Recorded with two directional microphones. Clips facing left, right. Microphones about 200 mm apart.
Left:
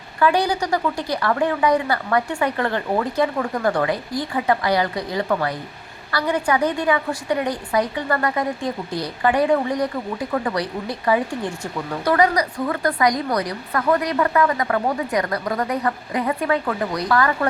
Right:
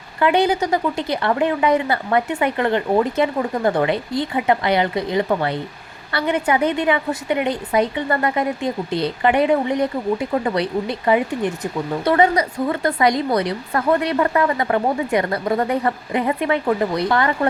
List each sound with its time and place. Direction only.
0.2 s a woman's voice: 25° right (ahead or behind)